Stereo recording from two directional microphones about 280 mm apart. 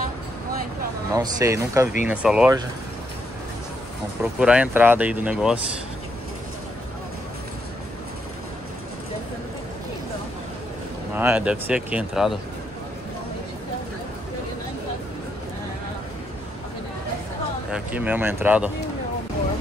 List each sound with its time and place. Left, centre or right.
1.1 s speech: centre
4.2 s speech: centre
11.1 s speech: centre
17.6 s speech: centre